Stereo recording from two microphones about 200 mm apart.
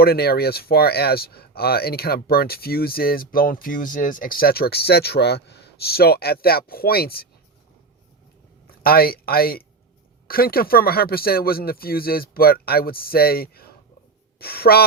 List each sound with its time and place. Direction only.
0.0 s speech: 50° left (ahead or behind)
8.8 s speech: 50° left (ahead or behind)